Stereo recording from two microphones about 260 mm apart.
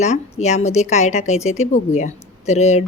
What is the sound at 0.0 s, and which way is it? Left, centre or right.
Speech, left.